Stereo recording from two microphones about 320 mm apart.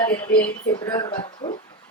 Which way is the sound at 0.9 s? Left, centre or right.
Centre.